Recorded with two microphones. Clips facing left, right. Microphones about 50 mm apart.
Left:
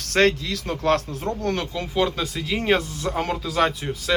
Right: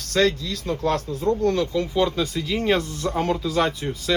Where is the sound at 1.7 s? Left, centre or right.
Left.